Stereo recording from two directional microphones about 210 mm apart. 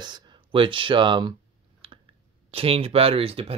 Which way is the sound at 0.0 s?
20° right (ahead or behind).